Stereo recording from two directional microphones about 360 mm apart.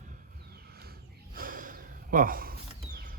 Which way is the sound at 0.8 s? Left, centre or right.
Right.